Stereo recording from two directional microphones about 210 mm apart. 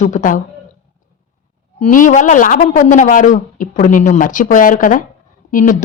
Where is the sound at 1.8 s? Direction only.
35° left (ahead or behind).